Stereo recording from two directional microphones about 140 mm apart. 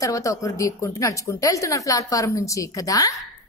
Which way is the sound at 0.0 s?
25° left (ahead or behind).